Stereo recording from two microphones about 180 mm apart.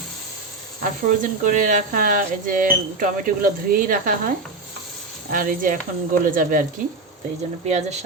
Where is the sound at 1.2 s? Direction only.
45° right (ahead or behind).